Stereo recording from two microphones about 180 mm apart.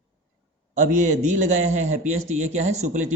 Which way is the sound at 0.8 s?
45° right (ahead or behind).